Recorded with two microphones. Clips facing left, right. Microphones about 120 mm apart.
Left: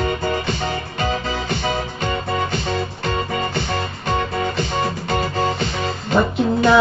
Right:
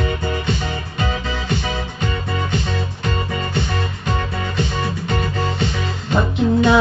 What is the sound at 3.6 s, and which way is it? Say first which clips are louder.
Music: left 1 dB; 40° left (ahead or behind).